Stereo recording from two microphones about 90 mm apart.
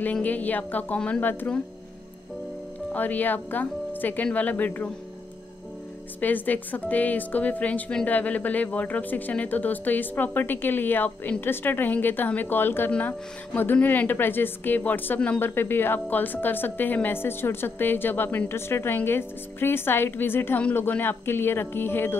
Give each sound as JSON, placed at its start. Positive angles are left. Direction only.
{"t": 0.0, "sound": "speech", "side_deg": 15}
{"t": 2.9, "sound": "a woman's voice", "side_deg": 20}
{"t": 6.2, "sound": "a woman's voice", "side_deg": 20}